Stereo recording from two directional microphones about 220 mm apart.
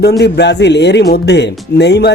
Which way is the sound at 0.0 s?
50° left (ahead or behind).